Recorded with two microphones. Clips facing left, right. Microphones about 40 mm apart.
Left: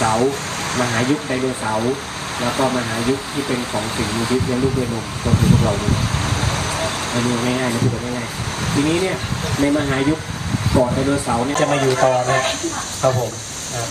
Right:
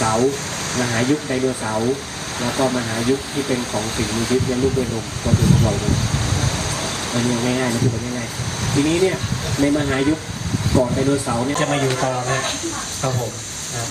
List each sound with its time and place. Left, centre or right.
0.0 s speech: centre
6.2 s vehicle: centre
8.7 s speech: centre
11.9 s speech: left